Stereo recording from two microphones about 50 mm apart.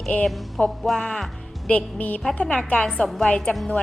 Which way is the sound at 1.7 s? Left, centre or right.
Left.